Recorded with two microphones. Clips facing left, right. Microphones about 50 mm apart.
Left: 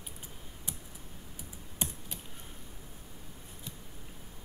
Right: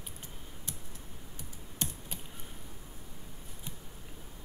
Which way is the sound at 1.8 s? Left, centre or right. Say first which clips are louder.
Even; centre.